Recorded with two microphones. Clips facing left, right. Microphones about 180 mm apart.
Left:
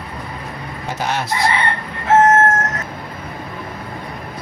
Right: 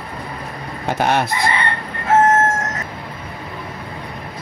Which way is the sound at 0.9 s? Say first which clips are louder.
Right 5 dB; 55° right (ahead or behind).